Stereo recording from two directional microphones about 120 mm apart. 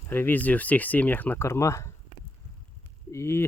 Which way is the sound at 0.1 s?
15° left (ahead or behind).